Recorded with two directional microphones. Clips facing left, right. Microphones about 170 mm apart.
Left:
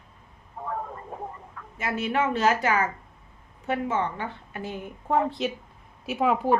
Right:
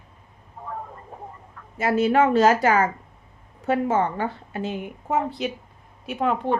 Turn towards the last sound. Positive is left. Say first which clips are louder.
# left 1 dB
turn(degrees=5)  # may be behind; listen again after turning